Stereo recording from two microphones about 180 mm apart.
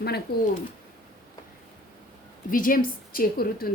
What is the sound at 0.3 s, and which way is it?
Speech, 60° left (ahead or behind).